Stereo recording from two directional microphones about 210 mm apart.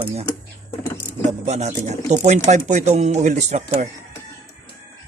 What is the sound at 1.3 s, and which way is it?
Speech, 35° right (ahead or behind).